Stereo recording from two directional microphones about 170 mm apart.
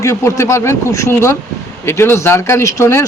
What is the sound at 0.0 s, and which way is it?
Speech, 15° left (ahead or behind).